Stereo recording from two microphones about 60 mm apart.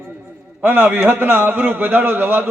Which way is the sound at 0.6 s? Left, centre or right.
Right.